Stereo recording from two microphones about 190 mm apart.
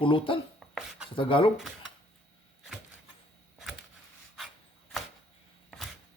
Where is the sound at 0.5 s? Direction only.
Centre (ahead or behind).